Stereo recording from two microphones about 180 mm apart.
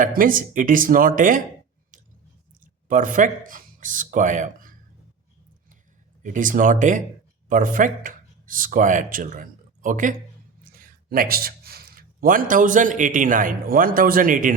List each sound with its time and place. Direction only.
0.0 s speech: 50° right (ahead or behind)
2.9 s speech: 45° right (ahead or behind)
6.2 s a man's voice: 45° right (ahead or behind)